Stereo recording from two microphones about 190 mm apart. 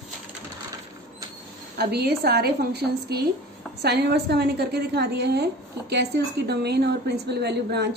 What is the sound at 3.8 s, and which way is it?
A woman's voice, 60° right (ahead or behind).